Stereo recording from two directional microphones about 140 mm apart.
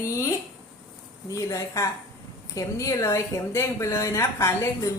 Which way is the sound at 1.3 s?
20° left (ahead or behind).